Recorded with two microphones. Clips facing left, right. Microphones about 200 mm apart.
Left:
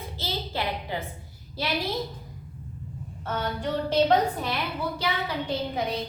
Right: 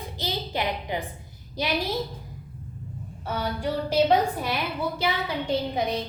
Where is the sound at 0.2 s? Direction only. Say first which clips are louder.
Right 2 dB; 15° right (ahead or behind).